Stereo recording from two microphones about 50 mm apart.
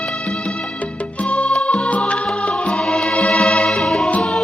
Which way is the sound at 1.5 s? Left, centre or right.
Centre.